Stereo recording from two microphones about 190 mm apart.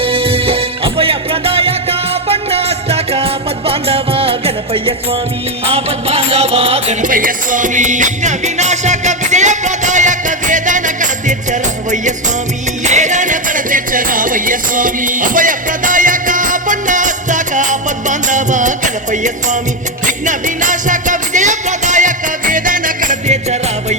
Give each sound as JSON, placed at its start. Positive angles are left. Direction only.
{"t": 0.0, "sound": "music", "side_deg": -30}